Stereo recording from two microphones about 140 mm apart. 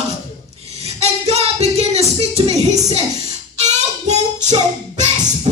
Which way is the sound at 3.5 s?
55° right (ahead or behind).